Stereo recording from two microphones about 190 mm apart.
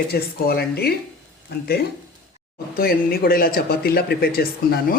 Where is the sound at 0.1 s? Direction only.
55° left (ahead or behind).